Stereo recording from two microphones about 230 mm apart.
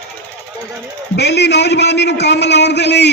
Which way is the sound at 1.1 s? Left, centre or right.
Left.